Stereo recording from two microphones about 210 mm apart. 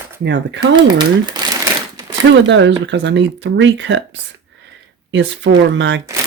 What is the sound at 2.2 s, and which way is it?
Speech, 60° right (ahead or behind).